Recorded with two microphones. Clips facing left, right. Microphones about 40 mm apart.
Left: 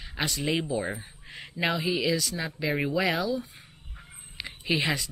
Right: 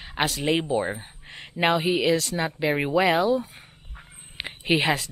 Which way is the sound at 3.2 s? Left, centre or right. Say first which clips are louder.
Right 7 dB; right.